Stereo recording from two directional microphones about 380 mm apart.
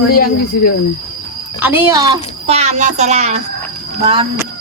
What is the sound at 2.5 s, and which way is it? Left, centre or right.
A woman's voice, centre.